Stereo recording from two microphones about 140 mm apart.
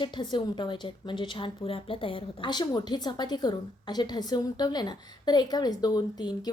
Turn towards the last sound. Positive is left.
turn(degrees=30)  # may be behind; listen again after turning